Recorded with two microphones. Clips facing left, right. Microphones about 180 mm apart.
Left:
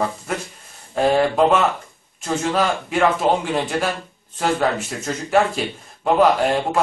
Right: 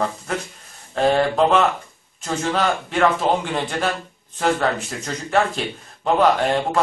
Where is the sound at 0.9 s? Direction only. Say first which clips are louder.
Left 1 dB; 5° left (ahead or behind).